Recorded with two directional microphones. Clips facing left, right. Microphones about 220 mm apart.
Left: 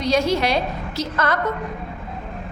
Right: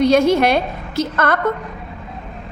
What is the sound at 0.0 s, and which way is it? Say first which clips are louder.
A woman's voice: right 6 dB; 55° right (ahead or behind).